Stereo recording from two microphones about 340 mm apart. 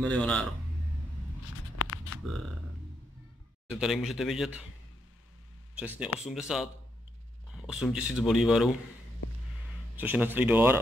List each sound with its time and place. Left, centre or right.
0.0 s speech: centre
1.8 s a sound: left
3.7 s speech: centre
5.8 s speech: centre
9.9 s speech: centre